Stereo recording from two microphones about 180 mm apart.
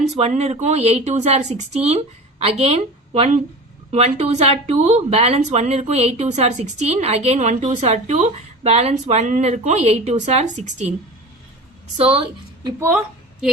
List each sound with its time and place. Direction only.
0.2 s a woman's voice: 35° right (ahead or behind)
11.9 s a woman's voice: 35° right (ahead or behind)